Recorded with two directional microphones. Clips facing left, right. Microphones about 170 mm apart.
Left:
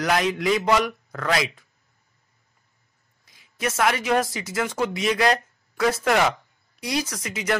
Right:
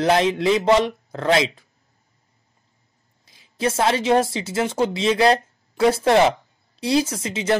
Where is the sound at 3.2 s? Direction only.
30° right (ahead or behind).